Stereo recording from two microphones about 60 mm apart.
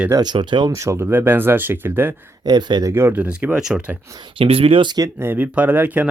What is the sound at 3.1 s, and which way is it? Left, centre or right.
Speech, right.